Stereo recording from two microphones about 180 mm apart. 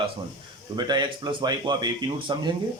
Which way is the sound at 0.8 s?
25° right (ahead or behind).